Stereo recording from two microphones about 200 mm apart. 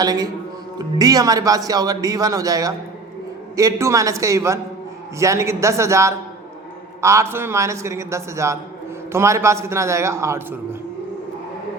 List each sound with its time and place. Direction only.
0.0 s a man's voice: 20° right (ahead or behind)